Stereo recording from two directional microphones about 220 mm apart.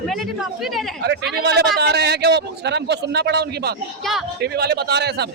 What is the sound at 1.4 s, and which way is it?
A man's voice, 50° right (ahead or behind).